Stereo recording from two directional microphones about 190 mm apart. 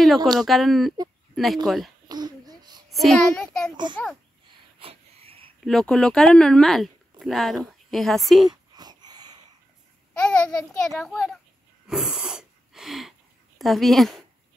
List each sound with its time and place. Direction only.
0.0 s speech: centre (ahead or behind)
2.0 s a sound: 20° right (ahead or behind)
2.9 s speech: centre (ahead or behind)
4.7 s wheeze: 30° right (ahead or behind)
5.6 s speech: centre (ahead or behind)
8.5 s wail: 20° right (ahead or behind)
10.3 s speech: 5° left (ahead or behind)
11.9 s a sound: 5° right (ahead or behind)
13.6 s speech: centre (ahead or behind)